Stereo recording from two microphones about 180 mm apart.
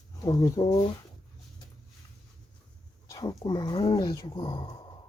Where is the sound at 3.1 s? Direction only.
25° left (ahead or behind).